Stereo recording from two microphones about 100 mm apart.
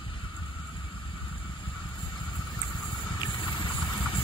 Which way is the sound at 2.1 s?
45° left (ahead or behind).